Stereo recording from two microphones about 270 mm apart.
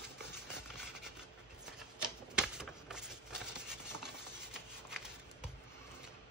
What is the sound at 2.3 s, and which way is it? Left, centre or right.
Typewriter, centre.